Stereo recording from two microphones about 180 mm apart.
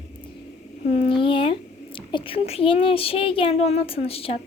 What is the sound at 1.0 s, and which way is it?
A woman's voice, 30° left (ahead or behind).